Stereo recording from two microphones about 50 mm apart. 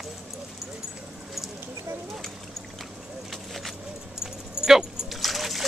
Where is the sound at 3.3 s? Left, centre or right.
Centre.